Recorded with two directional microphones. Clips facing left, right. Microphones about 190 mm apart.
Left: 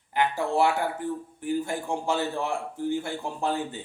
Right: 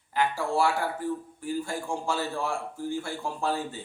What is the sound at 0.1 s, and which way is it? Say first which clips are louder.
A man's voice: left 2 dB; 20° left (ahead or behind).